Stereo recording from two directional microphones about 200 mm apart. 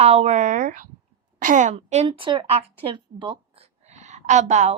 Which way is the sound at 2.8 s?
25° right (ahead or behind).